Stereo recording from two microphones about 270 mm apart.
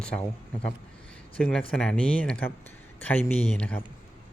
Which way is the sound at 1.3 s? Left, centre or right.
Centre.